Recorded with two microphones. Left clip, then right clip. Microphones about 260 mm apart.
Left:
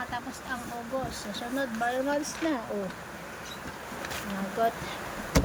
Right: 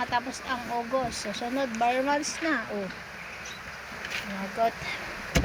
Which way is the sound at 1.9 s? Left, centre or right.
Centre.